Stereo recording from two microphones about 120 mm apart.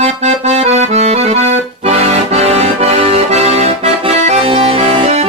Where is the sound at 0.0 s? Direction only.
65° right (ahead or behind).